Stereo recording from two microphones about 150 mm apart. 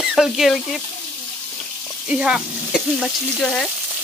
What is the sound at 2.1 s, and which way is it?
Speech, 5° right (ahead or behind).